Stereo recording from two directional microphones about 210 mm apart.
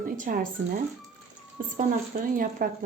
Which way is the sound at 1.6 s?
40° right (ahead or behind).